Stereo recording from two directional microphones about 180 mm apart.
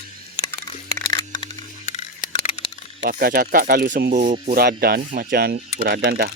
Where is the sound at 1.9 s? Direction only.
35° left (ahead or behind).